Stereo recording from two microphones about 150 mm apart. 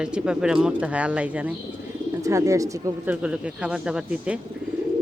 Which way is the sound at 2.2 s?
20° right (ahead or behind).